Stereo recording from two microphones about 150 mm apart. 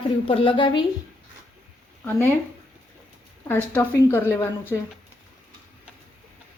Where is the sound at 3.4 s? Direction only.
15° left (ahead or behind).